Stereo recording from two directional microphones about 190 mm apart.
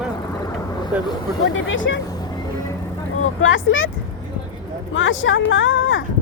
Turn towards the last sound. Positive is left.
turn(degrees=85)